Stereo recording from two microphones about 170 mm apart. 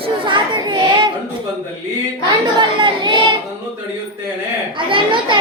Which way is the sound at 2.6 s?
30° right (ahead or behind).